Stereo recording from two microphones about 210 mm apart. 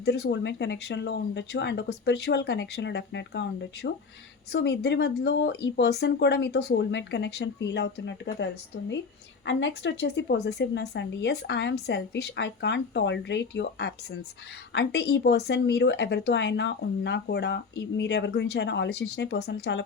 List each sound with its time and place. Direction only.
0.0 s speech: 55° left (ahead or behind)
9.5 s speech: 60° left (ahead or behind)